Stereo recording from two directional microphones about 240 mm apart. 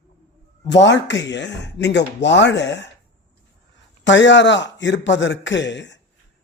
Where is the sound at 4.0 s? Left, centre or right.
Left.